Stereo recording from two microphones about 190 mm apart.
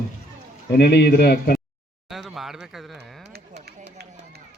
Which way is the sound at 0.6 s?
60° left (ahead or behind).